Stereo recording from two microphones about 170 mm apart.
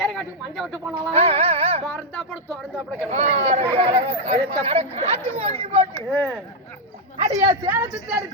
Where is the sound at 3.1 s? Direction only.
40° right (ahead or behind).